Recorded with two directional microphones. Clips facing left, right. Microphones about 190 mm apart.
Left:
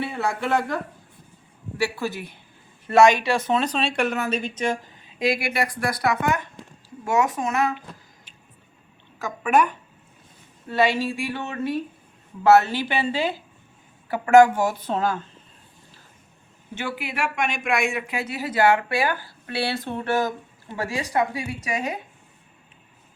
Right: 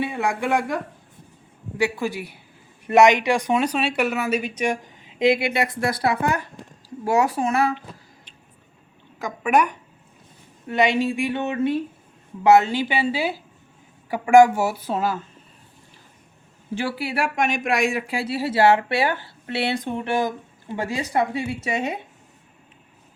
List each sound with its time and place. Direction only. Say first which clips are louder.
0.0 s speech: right 2 dB; 15° right (ahead or behind)
1.8 s speech: right 3 dB; 15° right (ahead or behind); by 7.8 s 30° right (ahead or behind)
9.2 s speech: even; 15° right (ahead or behind)
16.7 s speech: right 4 dB; 35° right (ahead or behind)